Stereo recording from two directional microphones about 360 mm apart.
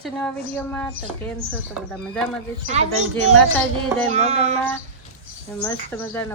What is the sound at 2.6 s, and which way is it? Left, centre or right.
Speech, centre.